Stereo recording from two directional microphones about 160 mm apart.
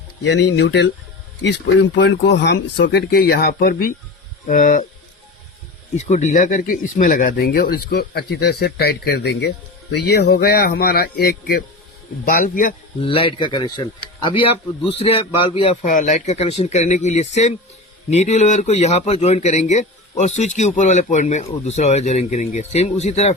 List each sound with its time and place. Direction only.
0.3 s a man's voice: 90° left; by 4.9 s 55° left (ahead or behind)
6.0 s a man's voice: 45° left (ahead or behind)
13.0 s speech: 35° left (ahead or behind)
15.8 s a man's voice: 50° left (ahead or behind)